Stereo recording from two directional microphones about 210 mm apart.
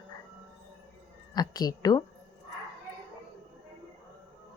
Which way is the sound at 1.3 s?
20° left (ahead or behind).